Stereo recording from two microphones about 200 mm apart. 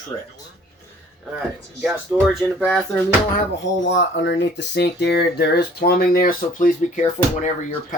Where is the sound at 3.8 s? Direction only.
65° left (ahead or behind).